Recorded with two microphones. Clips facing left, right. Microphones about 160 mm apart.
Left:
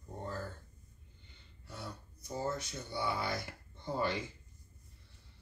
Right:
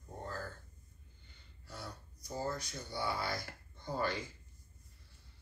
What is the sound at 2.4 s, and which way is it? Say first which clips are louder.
Speech: left 2 dB; 25° left (ahead or behind).